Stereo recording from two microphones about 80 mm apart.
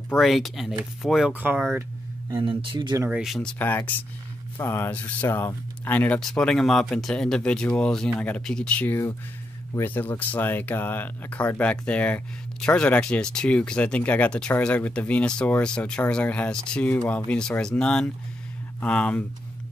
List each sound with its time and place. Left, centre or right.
0.2 s speech: centre
1.3 s speech: right
2.4 s speech: right
3.1 s speech: centre
3.5 s speech: left
4.9 s speech: centre
5.3 s speech: left
6.1 s speech: centre
8.8 s speech: left; by 19.2 s centre